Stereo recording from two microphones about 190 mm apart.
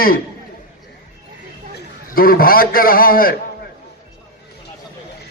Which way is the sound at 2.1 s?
50° left (ahead or behind).